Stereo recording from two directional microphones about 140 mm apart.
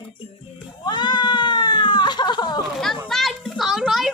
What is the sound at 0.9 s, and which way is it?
Cat, 30° left (ahead or behind).